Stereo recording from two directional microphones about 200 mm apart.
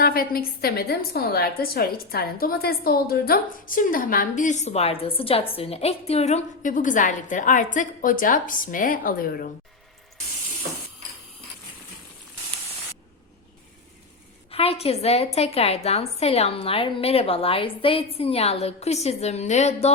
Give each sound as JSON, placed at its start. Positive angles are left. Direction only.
{"t": 0.0, "sound": "a woman's voice", "side_deg": 50}
{"t": 14.5, "sound": "a woman's voice", "side_deg": 30}